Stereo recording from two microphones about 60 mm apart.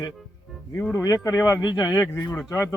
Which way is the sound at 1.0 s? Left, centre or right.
Left.